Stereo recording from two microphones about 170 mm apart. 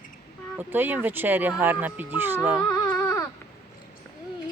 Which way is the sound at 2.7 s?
20° left (ahead or behind).